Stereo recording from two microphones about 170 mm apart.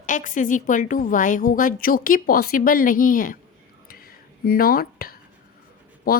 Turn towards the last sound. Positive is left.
turn(degrees=60)  # may be behind; listen again after turning